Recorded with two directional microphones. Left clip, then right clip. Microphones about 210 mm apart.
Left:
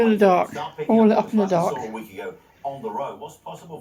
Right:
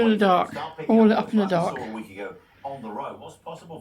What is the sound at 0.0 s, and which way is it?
Speech, centre (ahead or behind).